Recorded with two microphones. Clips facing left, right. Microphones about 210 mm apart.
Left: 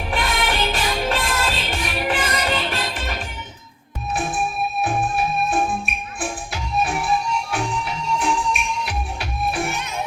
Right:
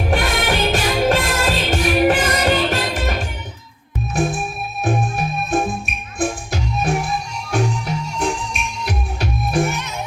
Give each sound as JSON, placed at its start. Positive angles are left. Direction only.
{"t": 0.1, "sound": "music", "side_deg": -45}